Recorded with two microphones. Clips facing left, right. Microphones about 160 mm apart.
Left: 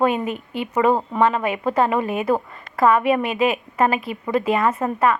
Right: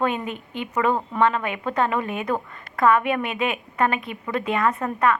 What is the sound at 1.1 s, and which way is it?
A woman's voice, 10° left (ahead or behind).